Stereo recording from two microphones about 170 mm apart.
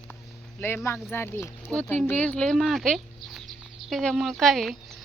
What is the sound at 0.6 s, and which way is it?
Speech, 15° left (ahead or behind).